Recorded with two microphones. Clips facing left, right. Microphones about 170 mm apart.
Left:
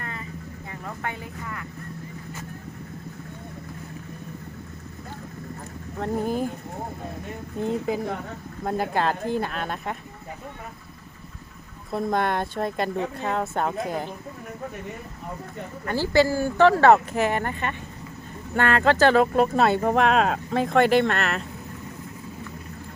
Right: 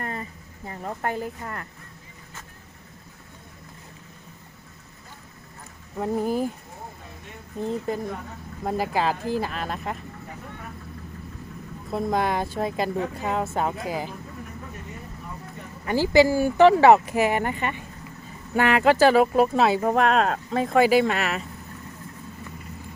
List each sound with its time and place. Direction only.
0.0 s vehicle: 35° right (ahead or behind)
0.7 s speech: 40° right (ahead or behind)
6.0 s speech: 5° right (ahead or behind)
7.6 s speech: 5° left (ahead or behind)
11.9 s speech: centre (ahead or behind)
15.9 s speech: 15° right (ahead or behind)